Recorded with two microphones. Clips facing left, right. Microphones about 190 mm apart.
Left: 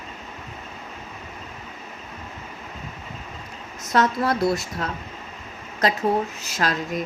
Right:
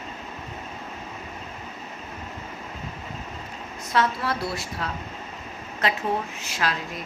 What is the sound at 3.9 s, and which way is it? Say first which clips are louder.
Speech: left 4 dB; 45° left (ahead or behind).